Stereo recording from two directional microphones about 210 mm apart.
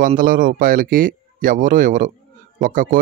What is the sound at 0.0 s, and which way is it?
Speech, 40° right (ahead or behind).